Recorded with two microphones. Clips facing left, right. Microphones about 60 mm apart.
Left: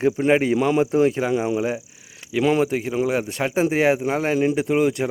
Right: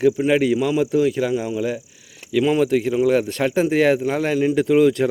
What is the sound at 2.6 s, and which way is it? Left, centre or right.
Speech, centre.